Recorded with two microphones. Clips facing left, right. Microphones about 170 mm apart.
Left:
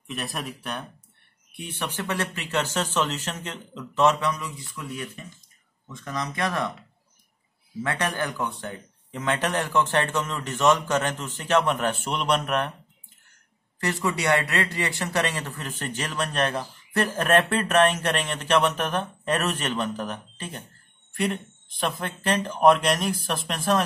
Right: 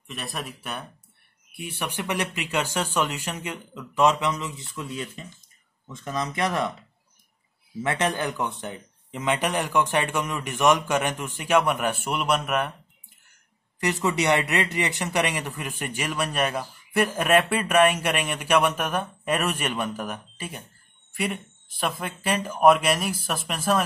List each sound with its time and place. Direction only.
0.0 s speech: centre (ahead or behind); by 6.7 s 20° right (ahead or behind)
7.8 s speech: 20° right (ahead or behind)
13.7 s speech: 15° right (ahead or behind)